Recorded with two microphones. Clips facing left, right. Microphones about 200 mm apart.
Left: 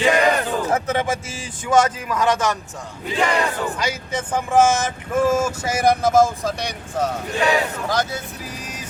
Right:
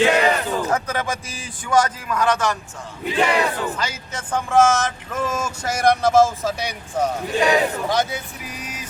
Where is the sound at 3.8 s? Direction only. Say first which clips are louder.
Left 4 dB; 10° left (ahead or behind); by 7.4 s 10° right (ahead or behind).